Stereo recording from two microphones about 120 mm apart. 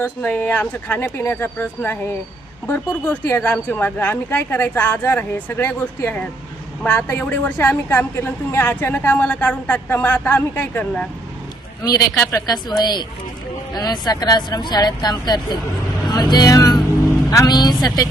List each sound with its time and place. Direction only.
0.0 s a woman's voice: 15° left (ahead or behind)
11.9 s speech: 30° left (ahead or behind)